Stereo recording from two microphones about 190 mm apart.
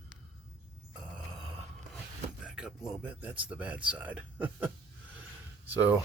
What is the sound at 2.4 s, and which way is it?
Speech, 5° right (ahead or behind).